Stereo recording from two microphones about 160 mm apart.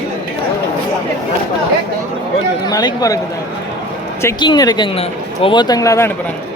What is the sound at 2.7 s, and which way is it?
Speech, 25° left (ahead or behind).